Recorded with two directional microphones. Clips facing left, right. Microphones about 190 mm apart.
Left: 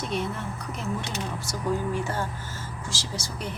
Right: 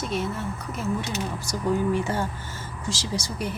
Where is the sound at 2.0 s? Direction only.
15° right (ahead or behind).